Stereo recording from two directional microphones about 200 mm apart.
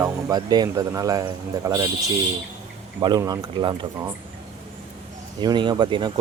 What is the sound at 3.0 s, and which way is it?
Speech, 20° right (ahead or behind).